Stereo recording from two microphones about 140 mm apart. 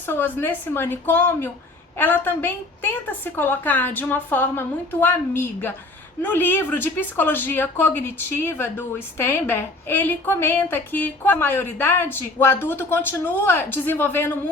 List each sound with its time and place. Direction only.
0.0 s a woman's voice: 15° left (ahead or behind)